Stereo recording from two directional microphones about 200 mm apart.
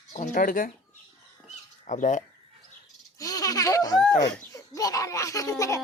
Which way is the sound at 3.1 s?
15° left (ahead or behind).